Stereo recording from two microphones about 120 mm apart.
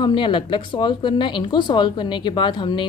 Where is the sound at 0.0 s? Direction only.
40° left (ahead or behind).